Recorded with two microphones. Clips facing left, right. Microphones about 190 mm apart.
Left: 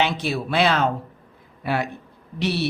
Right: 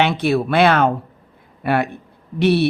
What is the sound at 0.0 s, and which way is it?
Speech, 60° right (ahead or behind).